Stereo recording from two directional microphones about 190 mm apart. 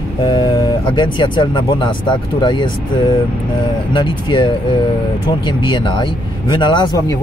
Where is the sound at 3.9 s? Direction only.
25° left (ahead or behind).